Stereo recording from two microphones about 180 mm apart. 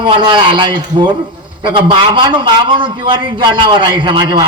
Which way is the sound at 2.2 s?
25° right (ahead or behind).